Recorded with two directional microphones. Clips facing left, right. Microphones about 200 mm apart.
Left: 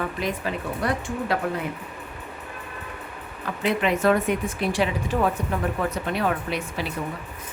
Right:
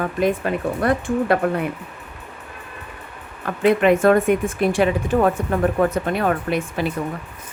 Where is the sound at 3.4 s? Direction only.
55° right (ahead or behind).